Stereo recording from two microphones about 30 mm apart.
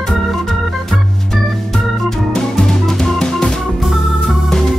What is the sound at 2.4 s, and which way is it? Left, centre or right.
Music, centre.